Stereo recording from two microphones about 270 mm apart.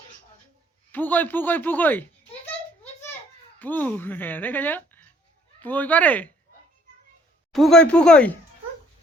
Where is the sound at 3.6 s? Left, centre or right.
Centre.